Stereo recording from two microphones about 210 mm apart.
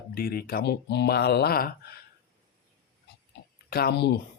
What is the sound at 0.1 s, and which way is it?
Speech, 45° left (ahead or behind).